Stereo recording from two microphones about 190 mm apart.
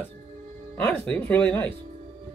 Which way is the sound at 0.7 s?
5° left (ahead or behind).